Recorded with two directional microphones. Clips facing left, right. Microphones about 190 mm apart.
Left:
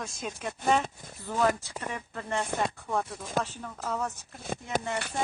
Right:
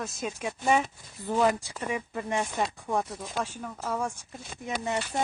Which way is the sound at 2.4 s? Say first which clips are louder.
Even; 55° left (ahead or behind).